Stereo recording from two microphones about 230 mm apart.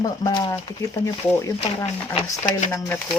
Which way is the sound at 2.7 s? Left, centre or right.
Centre.